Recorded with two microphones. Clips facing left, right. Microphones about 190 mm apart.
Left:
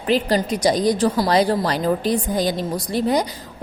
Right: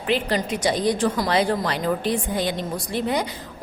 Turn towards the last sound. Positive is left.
turn(degrees=35)  # may be behind; listen again after turning